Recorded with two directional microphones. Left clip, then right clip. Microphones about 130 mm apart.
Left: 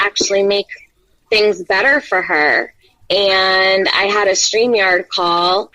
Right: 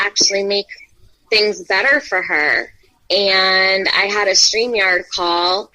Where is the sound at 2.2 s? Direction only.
15° left (ahead or behind).